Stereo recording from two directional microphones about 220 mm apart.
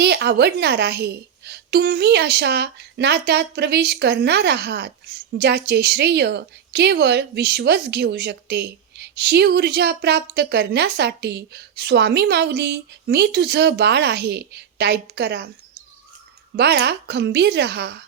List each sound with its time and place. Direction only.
0.0 s a woman's voice: 50° right (ahead or behind)
16.6 s a woman's voice: 50° right (ahead or behind)